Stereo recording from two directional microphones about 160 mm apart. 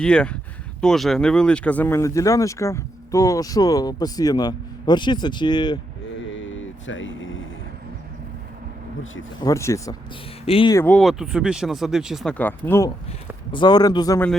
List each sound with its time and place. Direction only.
0.0 s speech: 5° left (ahead or behind); by 5.8 s 25° left (ahead or behind)
9.4 s speech: 20° left (ahead or behind)
10.4 s speech: 35° left (ahead or behind)
10.8 s speech: centre (ahead or behind)
13.5 s speech: 25° left (ahead or behind)